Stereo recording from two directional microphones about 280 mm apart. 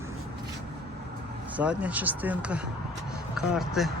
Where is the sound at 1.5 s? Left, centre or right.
Centre.